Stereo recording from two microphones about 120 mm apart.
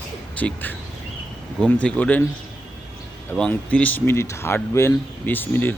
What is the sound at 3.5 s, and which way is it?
Speech, 15° left (ahead or behind).